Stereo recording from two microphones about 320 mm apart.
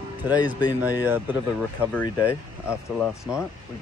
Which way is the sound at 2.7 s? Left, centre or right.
Centre.